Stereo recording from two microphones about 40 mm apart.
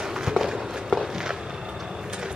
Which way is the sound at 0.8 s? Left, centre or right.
Centre.